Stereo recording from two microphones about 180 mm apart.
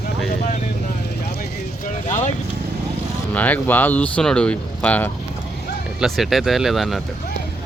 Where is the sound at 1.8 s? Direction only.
40° left (ahead or behind).